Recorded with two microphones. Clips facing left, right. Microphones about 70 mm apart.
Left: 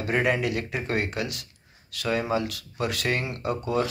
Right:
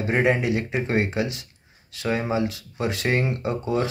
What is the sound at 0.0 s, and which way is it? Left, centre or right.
Speech, right.